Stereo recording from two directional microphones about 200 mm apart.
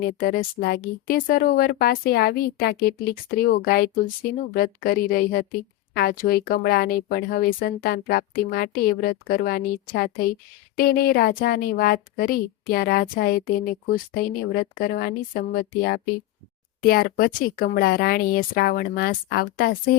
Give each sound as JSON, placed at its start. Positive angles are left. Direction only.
{"t": 0.1, "sound": "speech", "side_deg": 45}